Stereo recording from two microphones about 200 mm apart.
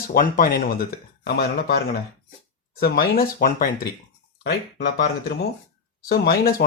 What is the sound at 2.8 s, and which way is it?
Speech, 50° left (ahead or behind).